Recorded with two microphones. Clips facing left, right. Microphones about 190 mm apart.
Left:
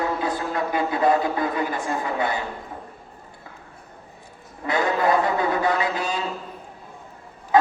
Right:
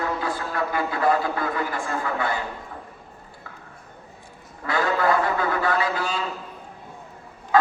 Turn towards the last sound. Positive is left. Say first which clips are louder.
# left 1 dB
turn(degrees=20)  # may be behind; listen again after turning